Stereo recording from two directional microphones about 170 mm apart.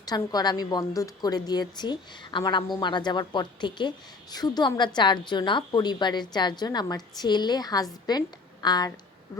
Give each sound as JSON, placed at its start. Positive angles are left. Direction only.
{"t": 0.0, "sound": "a woman's voice", "side_deg": 25}